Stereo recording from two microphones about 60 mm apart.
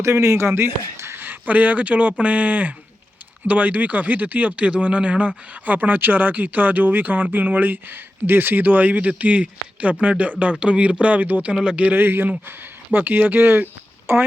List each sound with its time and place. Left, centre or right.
0.0 s speech: right
1.2 s speech: right